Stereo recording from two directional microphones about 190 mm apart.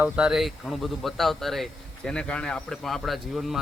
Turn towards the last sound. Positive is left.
turn(degrees=0)  # may be behind; listen again after turning